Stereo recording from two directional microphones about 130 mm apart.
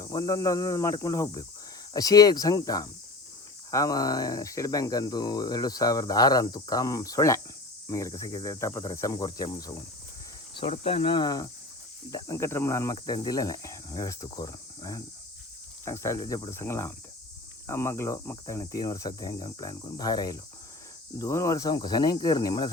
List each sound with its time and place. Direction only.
0.0 s speech: 30° left (ahead or behind)
10.7 s cricket: 45° left (ahead or behind); by 11.5 s 30° left (ahead or behind)
12.1 s speech: 25° left (ahead or behind)